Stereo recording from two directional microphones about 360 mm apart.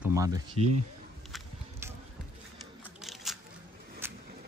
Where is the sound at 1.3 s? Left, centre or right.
Centre.